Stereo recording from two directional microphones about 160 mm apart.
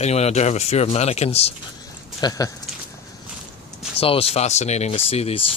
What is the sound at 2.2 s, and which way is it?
Speech, 20° left (ahead or behind).